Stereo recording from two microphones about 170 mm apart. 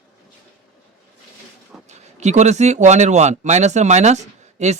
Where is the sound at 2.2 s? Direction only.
40° right (ahead or behind).